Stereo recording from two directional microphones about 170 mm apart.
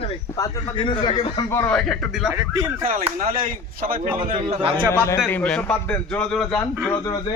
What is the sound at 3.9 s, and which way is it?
A man's voice, 40° right (ahead or behind).